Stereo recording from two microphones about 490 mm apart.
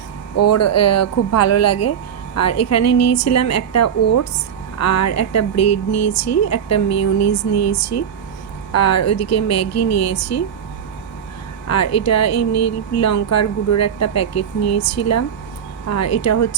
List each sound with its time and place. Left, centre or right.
0.3 s speech: left
11.7 s speech: left